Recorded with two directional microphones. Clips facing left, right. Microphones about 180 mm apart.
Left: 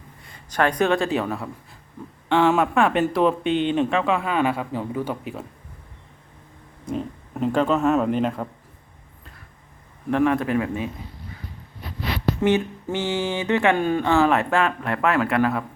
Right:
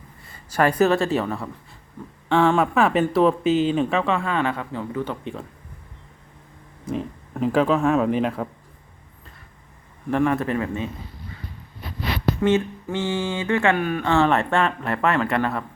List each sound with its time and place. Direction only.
0.3 s speech: 5° right (ahead or behind)
6.8 s speech: centre (ahead or behind)
10.1 s speech: centre (ahead or behind)
12.4 s speech: 15° left (ahead or behind)
14.1 s speech: 5° left (ahead or behind)